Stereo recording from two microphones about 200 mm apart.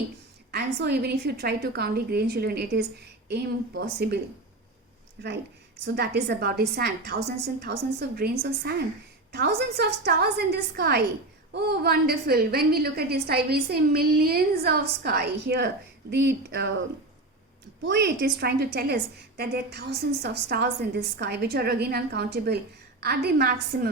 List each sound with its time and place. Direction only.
0.5 s a woman's voice: 55° right (ahead or behind)
5.8 s a woman's voice: 55° right (ahead or behind)
17.8 s a woman's voice: 60° right (ahead or behind)